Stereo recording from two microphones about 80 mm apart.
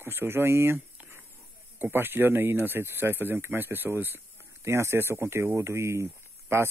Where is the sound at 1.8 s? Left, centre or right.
Right.